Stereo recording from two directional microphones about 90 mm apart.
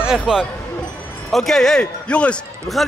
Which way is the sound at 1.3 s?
5° left (ahead or behind).